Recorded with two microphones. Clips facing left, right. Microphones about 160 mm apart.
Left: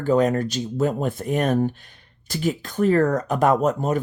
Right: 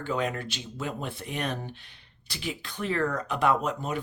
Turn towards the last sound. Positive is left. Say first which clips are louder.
# left 7 dB
turn(degrees=45)  # may be behind; listen again after turning